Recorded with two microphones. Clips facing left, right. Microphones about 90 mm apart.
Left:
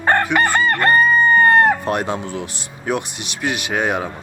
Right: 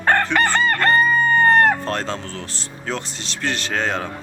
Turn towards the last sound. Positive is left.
turn(degrees=15)  # may be behind; listen again after turning